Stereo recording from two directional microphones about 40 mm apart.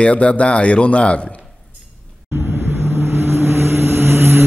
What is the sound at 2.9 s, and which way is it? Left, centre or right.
Vehicle, right.